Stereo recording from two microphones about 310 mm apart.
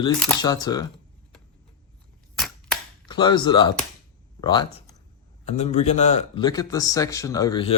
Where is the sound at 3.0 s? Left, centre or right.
Centre.